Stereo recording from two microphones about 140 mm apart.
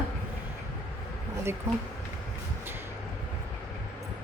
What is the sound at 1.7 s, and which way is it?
Speech, 20° right (ahead or behind).